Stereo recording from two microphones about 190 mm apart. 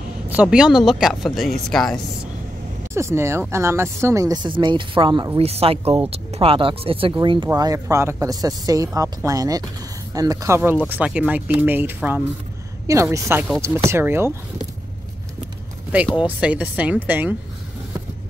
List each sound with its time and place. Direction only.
0.3 s speech: 5° right (ahead or behind)
2.9 s speech: 15° right (ahead or behind)
16.3 s speech: 5° right (ahead or behind)